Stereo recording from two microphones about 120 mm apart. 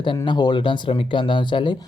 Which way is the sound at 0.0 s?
40° left (ahead or behind).